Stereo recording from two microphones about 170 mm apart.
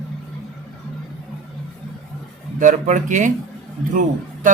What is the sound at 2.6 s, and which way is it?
Speech, 50° right (ahead or behind).